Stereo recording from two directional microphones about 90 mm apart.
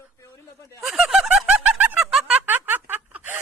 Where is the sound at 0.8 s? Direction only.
5° right (ahead or behind).